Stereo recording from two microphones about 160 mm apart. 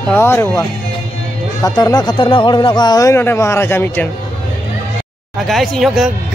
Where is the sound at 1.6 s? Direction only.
25° left (ahead or behind).